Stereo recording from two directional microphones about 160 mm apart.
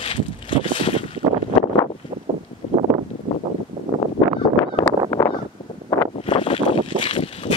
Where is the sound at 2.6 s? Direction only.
40° left (ahead or behind).